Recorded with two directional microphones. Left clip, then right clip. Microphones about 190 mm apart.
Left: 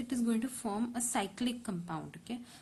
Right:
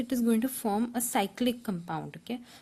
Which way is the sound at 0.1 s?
40° right (ahead or behind).